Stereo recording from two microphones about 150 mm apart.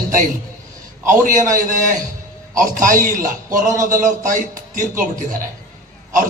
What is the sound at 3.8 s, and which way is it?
Speech, 60° right (ahead or behind).